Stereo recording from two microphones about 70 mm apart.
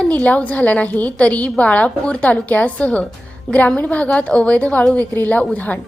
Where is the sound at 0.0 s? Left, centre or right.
Centre.